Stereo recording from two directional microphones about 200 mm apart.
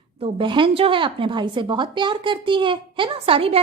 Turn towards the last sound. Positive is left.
turn(degrees=-30)  # may be behind; listen again after turning